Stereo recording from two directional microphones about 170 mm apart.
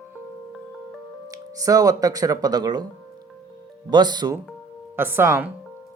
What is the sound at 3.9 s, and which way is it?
Speech, 25° right (ahead or behind).